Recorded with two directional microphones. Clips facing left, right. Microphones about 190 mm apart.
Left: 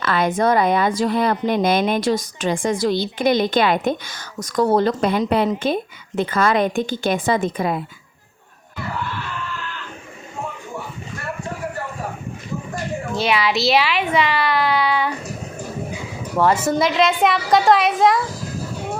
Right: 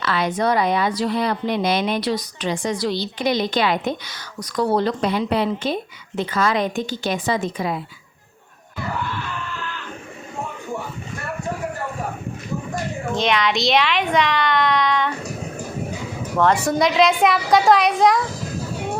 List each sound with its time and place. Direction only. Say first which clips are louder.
0.0 s a woman's voice: left 3 dB; 50° left (ahead or behind)
13.1 s speech: even; 5° left (ahead or behind)
16.4 s speech: even; 5° left (ahead or behind)